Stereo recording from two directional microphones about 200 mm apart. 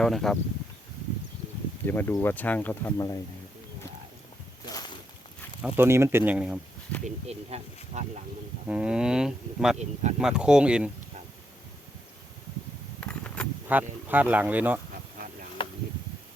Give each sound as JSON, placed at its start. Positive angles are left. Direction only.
{"t": 0.0, "sound": "speech", "side_deg": 0}
{"t": 1.9, "sound": "speech", "side_deg": 10}
{"t": 4.7, "sound": "a sound", "side_deg": 20}
{"t": 5.6, "sound": "speech", "side_deg": -10}
{"t": 7.0, "sound": "speech", "side_deg": -35}
{"t": 8.6, "sound": "speech", "side_deg": -5}
{"t": 9.7, "sound": "speech", "side_deg": -35}
{"t": 10.2, "sound": "speech", "side_deg": -5}
{"t": 13.0, "sound": "a sound", "side_deg": 5}
{"t": 13.7, "sound": "speech", "side_deg": -10}
{"t": 15.6, "sound": "a sound", "side_deg": 25}